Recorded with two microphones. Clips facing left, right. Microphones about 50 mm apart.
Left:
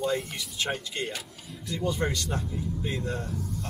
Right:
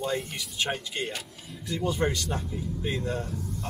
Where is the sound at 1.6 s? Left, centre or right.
Centre.